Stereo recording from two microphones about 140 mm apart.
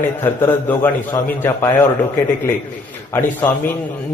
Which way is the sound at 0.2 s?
15° left (ahead or behind).